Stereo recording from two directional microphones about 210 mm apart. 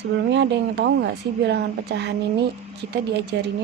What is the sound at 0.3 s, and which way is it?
A woman's voice, 55° right (ahead or behind).